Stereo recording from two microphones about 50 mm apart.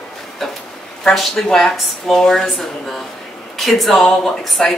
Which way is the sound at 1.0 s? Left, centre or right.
Centre.